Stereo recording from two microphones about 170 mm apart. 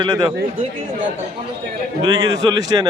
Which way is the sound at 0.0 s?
25° right (ahead or behind).